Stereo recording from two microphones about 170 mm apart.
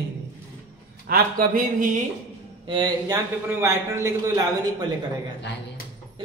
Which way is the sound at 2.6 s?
30° right (ahead or behind).